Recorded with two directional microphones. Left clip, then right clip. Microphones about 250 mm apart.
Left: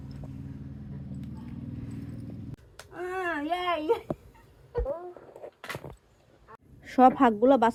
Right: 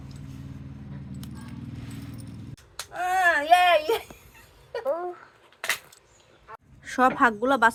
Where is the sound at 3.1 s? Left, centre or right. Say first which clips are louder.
Right 12 dB; right.